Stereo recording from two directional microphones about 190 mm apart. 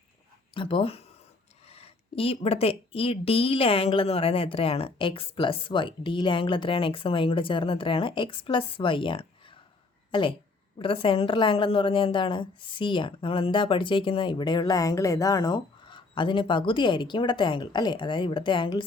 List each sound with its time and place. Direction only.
0.5 s a woman's voice: 25° left (ahead or behind)